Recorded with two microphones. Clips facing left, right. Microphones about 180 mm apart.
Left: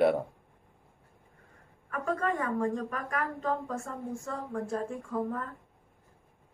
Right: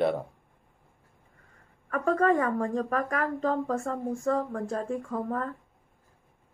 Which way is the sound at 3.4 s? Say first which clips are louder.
Right 5 dB; 70° right (ahead or behind).